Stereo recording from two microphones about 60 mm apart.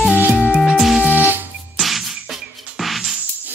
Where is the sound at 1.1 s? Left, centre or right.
Right.